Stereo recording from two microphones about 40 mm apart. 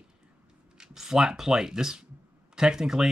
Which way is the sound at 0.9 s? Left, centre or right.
Centre.